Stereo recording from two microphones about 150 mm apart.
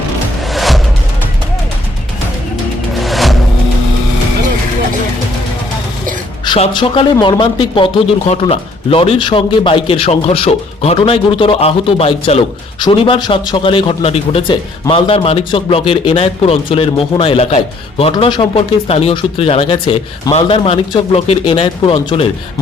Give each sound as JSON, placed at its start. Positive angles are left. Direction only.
{"t": 0.5, "sound": "music", "side_deg": 0}
{"t": 3.0, "sound": "vehicle", "side_deg": 0}
{"t": 6.7, "sound": "speech", "side_deg": 30}
{"t": 18.1, "sound": "speech", "side_deg": 30}